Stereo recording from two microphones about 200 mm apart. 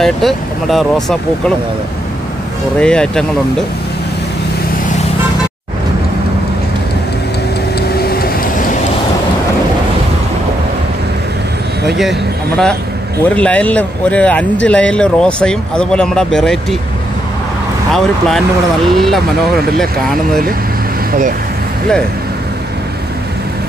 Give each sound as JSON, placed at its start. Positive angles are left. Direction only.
{"t": 0.0, "sound": "speech", "side_deg": 0}
{"t": 2.8, "sound": "speech", "side_deg": 5}
{"t": 8.0, "sound": "vehicle", "side_deg": 50}
{"t": 12.0, "sound": "speech", "side_deg": 0}
{"t": 18.9, "sound": "speech", "side_deg": 0}
{"t": 21.1, "sound": "speech", "side_deg": -45}